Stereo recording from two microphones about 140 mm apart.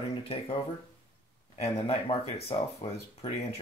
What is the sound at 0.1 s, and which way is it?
Speech, 45° left (ahead or behind).